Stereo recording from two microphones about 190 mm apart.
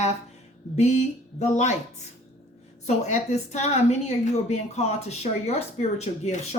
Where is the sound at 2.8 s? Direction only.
40° left (ahead or behind).